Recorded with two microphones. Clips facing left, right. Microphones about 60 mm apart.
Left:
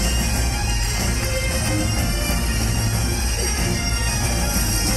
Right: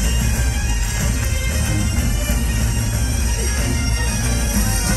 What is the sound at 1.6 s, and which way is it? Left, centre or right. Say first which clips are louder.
Music: even; left.